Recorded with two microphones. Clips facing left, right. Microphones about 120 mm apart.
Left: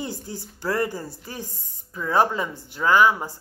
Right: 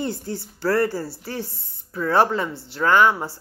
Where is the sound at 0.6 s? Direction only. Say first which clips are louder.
Right 4 dB; 20° left (ahead or behind).